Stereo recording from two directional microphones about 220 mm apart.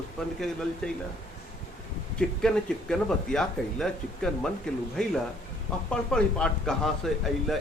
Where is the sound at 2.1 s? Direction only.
5° left (ahead or behind).